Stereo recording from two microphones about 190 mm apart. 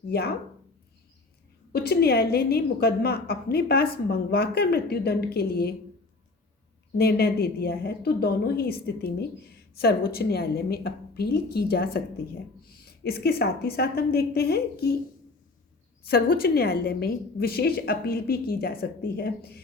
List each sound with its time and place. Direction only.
0.1 s a woman's voice: 55° left (ahead or behind)
1.7 s a woman's voice: 55° left (ahead or behind)
6.9 s a woman's voice: 55° left (ahead or behind)
16.0 s a woman's voice: 50° left (ahead or behind)